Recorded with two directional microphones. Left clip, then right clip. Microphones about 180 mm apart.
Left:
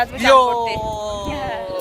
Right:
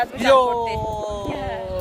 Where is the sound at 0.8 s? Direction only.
20° right (ahead or behind).